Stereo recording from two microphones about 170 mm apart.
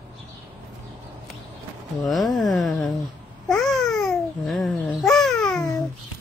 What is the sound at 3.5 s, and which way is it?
Babbling, centre (ahead or behind).